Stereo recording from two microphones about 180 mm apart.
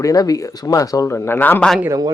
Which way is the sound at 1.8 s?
20° right (ahead or behind).